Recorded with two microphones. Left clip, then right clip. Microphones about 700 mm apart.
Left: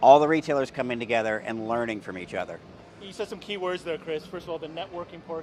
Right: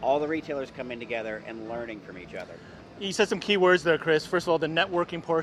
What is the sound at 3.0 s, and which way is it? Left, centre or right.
Speech, right.